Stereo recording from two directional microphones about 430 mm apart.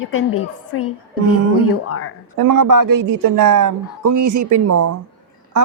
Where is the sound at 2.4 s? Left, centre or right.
Right.